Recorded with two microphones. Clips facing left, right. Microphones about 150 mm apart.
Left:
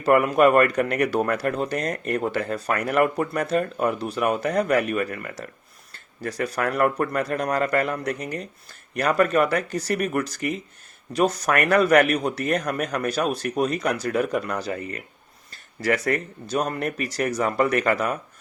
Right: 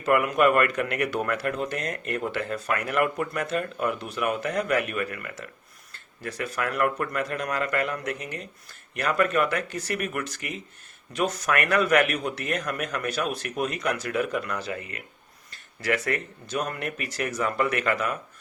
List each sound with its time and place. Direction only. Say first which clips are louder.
0.0 s a man's voice: left 4 dB; 40° left (ahead or behind)